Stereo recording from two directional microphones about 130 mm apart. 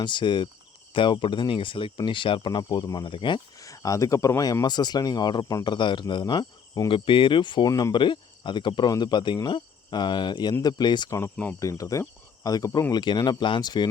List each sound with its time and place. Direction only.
0.0 s speech: 35° left (ahead or behind)
3.6 s speech: 25° left (ahead or behind)
7.7 s speech: 25° left (ahead or behind)
7.9 s speech: 40° left (ahead or behind)
11.2 s speech: 10° left (ahead or behind)
11.6 s speech: 25° left (ahead or behind)